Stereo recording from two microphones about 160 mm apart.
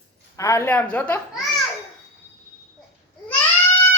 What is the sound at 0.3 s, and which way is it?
Speech, 20° left (ahead or behind).